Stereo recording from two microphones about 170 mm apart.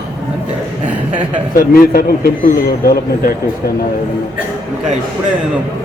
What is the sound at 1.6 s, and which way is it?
Speech, 60° left (ahead or behind).